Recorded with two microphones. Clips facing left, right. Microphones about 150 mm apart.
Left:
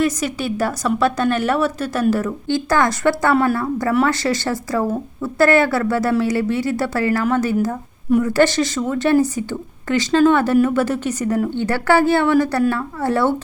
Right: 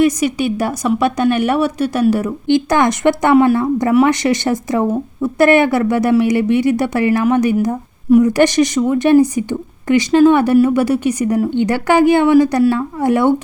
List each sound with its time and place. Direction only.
0.0 s a woman's voice: 15° right (ahead or behind)